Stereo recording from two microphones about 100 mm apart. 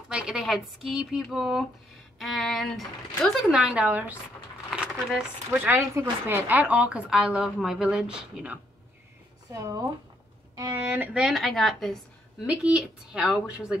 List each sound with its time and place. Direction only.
0.1 s speech: 5° right (ahead or behind)
3.5 s speech: 10° right (ahead or behind)
9.5 s speech: 35° right (ahead or behind)
11.1 s speech: centre (ahead or behind)
12.4 s speech: 10° right (ahead or behind)